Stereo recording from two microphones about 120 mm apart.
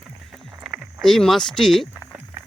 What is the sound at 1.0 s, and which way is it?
Speech, centre (ahead or behind).